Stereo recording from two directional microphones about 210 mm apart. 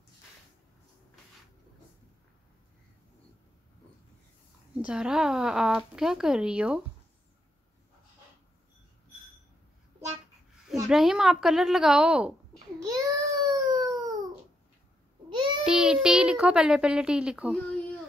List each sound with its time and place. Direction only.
4.8 s speech: 5° right (ahead or behind)
10.9 s speech: centre (ahead or behind)
12.8 s a sound: 15° right (ahead or behind)
15.2 s babbling: 25° right (ahead or behind)
15.6 s speech: 5° right (ahead or behind)